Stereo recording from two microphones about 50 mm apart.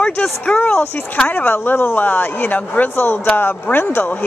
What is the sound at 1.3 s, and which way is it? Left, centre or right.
Speech, left.